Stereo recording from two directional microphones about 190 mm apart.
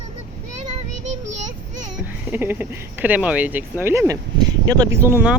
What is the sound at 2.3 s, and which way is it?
Speech, 10° right (ahead or behind).